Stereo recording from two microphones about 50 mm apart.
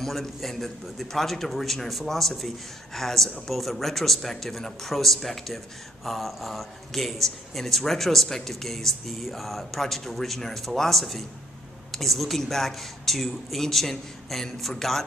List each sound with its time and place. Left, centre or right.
0.0 s a man's voice: centre